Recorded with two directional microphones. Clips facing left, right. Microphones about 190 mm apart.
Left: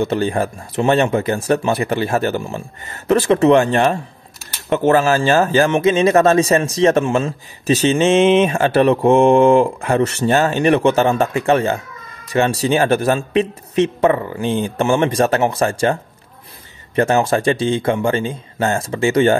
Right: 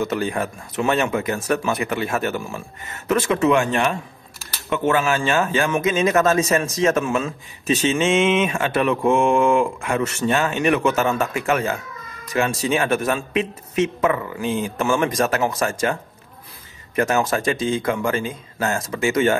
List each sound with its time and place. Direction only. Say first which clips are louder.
0.0 s speech: left 5 dB; 30° left (ahead or behind)